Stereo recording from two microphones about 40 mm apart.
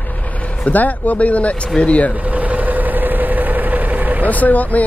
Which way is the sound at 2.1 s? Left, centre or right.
Right.